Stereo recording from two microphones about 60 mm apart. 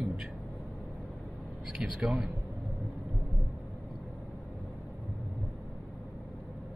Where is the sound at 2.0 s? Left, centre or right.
Centre.